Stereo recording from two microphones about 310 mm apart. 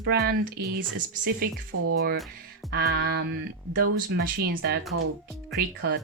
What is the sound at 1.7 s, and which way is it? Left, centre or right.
Speech, right.